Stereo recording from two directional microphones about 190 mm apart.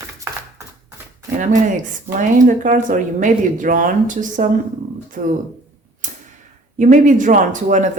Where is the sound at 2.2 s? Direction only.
40° right (ahead or behind).